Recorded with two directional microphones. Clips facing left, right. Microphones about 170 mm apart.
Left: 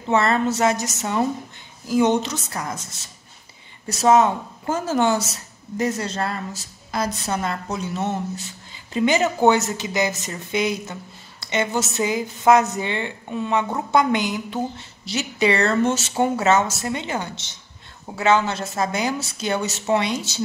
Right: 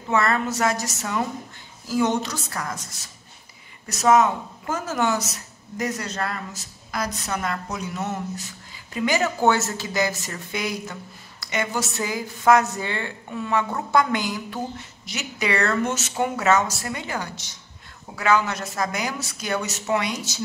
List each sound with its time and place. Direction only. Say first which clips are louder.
0.1 s speech: left 3 dB; 25° left (ahead or behind)